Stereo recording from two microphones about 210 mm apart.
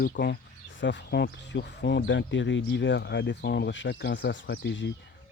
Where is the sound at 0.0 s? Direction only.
50° left (ahead or behind).